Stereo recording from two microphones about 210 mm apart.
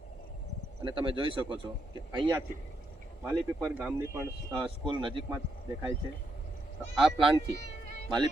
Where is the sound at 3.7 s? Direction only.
10° right (ahead or behind).